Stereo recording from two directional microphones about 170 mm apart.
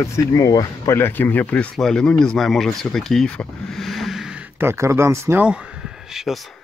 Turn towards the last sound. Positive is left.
turn(degrees=0)  # may be behind; listen again after turning